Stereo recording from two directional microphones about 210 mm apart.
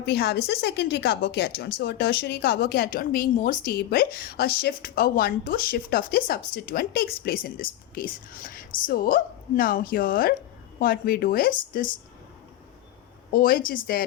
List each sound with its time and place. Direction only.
0.0 s a woman's voice: 50° left (ahead or behind)
13.3 s a woman's voice: 45° left (ahead or behind)